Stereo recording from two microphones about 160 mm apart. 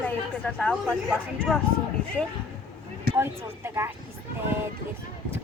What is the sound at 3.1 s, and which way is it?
Speech, 15° right (ahead or behind).